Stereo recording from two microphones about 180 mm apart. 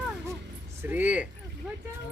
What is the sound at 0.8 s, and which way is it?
Speech, 10° right (ahead or behind).